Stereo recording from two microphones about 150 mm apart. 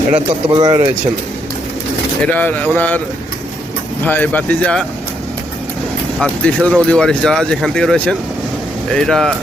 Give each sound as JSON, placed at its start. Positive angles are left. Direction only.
{"t": 0.1, "sound": "speech", "side_deg": -30}
{"t": 2.2, "sound": "speech", "side_deg": 10}
{"t": 4.0, "sound": "speech", "side_deg": 10}
{"t": 6.1, "sound": "speech", "side_deg": 5}